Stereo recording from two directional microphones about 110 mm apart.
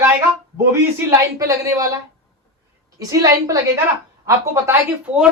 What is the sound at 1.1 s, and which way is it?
A woman's voice, 25° right (ahead or behind).